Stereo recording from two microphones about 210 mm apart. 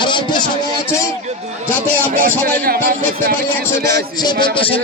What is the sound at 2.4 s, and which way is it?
Speech, 45° right (ahead or behind).